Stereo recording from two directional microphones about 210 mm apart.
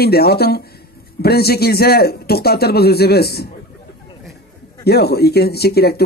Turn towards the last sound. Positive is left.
turn(degrees=50)  # may be behind; listen again after turning